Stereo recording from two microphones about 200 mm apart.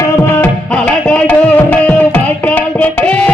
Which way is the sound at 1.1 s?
5° left (ahead or behind).